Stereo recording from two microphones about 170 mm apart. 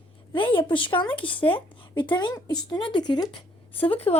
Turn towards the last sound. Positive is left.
turn(degrees=35)  # may be behind; listen again after turning